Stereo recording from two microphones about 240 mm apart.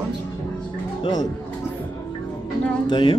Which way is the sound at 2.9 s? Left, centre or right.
Centre.